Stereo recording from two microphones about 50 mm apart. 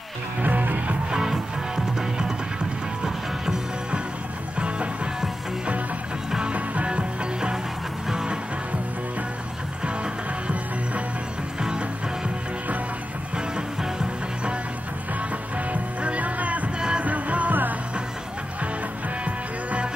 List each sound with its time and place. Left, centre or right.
0.4 s music: right
1.1 s music: centre
6.5 s music: right
15.7 s music: right